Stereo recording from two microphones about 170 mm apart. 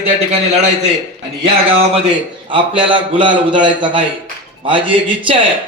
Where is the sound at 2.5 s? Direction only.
30° right (ahead or behind).